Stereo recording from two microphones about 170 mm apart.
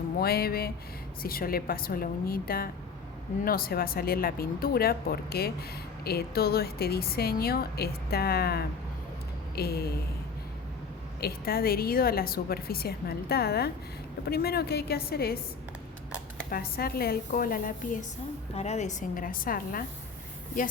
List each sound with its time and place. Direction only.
0.2 s a woman's voice: 65° left (ahead or behind)
11.2 s a woman's voice: 65° left (ahead or behind)
16.5 s a woman's voice: 60° left (ahead or behind)
18.5 s a woman's voice: 40° left (ahead or behind); by 19.8 s 60° left (ahead or behind)